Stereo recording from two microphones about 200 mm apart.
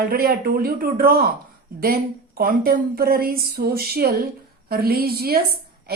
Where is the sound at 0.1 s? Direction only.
50° right (ahead or behind).